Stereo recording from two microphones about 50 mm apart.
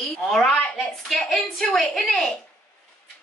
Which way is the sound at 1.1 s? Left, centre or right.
Centre.